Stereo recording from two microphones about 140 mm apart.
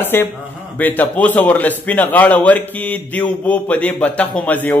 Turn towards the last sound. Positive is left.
turn(degrees=10)  # may be behind; listen again after turning